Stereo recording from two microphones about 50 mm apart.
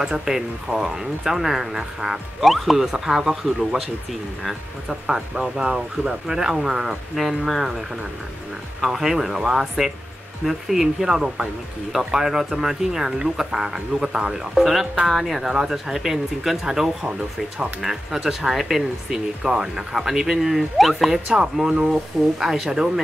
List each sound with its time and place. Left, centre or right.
0.0 s speech: centre
5.0 s speech: centre
8.8 s speech: centre
21.3 s speech: centre
22.4 s speech: centre